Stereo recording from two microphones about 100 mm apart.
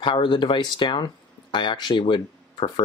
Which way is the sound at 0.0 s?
55° left (ahead or behind).